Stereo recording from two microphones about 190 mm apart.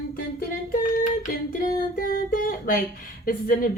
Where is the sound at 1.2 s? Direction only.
45° left (ahead or behind).